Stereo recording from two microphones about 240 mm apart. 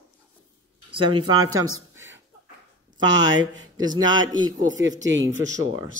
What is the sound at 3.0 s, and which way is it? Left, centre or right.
Speech, right.